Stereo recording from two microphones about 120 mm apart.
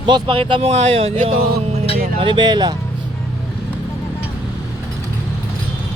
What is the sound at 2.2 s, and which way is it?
Speech, 40° right (ahead or behind).